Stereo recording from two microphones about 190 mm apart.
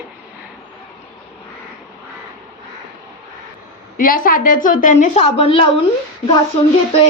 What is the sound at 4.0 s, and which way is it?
A woman's voice, 50° left (ahead or behind).